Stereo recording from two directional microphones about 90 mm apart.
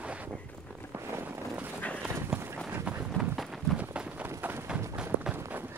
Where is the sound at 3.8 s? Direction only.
15° right (ahead or behind).